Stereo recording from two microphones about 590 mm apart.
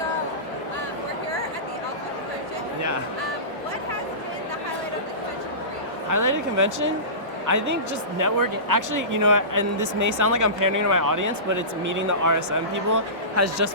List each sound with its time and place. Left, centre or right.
6.1 s a man's voice: right